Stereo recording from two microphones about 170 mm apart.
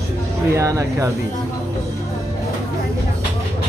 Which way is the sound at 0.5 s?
20° right (ahead or behind).